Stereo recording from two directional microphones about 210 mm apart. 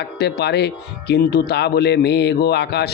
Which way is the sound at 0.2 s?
50° left (ahead or behind).